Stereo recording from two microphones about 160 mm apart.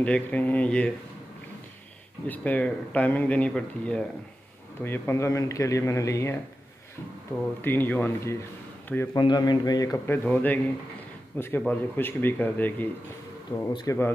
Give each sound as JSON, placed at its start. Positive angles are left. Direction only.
{"t": 0.0, "sound": "speech", "side_deg": 10}
{"t": 2.2, "sound": "a man's voice", "side_deg": 10}
{"t": 9.1, "sound": "a man's voice", "side_deg": 25}